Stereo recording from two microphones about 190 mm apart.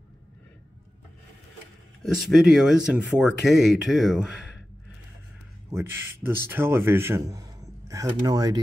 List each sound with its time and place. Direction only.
2.1 s speech: centre (ahead or behind)
5.7 s speech: 10° right (ahead or behind)